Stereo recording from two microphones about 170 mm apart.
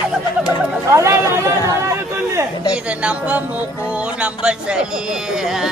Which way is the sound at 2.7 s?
5° right (ahead or behind).